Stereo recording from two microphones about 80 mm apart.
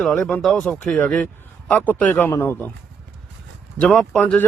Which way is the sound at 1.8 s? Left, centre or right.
Left.